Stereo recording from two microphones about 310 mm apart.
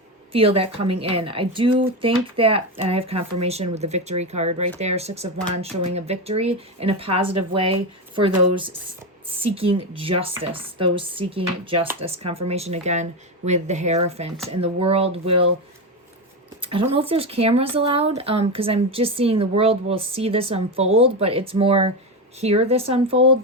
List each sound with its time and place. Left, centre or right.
0.3 s speech: centre
16.6 s speech: centre